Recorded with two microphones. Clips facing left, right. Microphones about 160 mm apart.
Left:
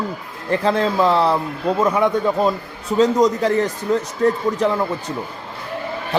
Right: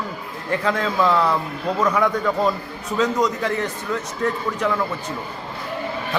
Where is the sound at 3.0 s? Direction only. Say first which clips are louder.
Left 5 dB; 35° left (ahead or behind).